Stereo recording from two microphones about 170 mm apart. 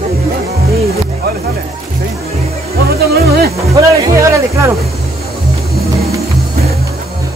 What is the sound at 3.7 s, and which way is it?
Music, 20° right (ahead or behind).